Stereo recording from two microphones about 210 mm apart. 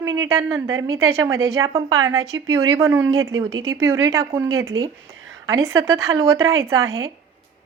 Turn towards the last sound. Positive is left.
turn(degrees=-15)  # may be behind; listen again after turning